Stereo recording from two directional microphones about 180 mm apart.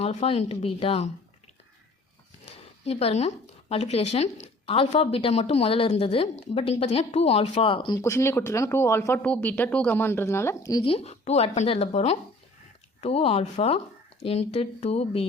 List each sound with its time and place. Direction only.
0.0 s speech: 35° left (ahead or behind)
2.8 s speech: 35° left (ahead or behind); by 10.8 s 20° left (ahead or behind)
10.8 s speech: 35° left (ahead or behind)